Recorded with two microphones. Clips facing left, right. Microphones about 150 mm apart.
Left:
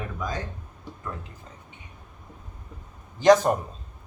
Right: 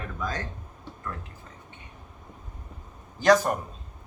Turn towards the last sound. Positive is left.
turn(degrees=20)  # may be behind; listen again after turning